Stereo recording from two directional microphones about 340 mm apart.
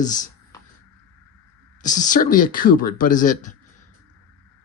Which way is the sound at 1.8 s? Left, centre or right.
Left.